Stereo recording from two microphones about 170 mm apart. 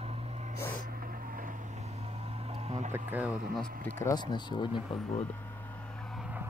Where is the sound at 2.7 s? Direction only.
40° right (ahead or behind).